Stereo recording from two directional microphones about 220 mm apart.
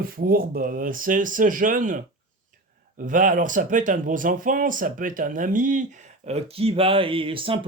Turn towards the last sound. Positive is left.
turn(degrees=-25)  # may be behind; listen again after turning